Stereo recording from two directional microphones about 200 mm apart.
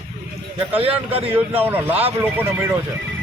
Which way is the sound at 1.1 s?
30° right (ahead or behind).